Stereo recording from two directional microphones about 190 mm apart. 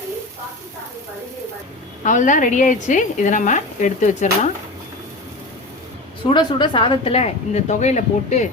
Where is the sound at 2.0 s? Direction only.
40° left (ahead or behind).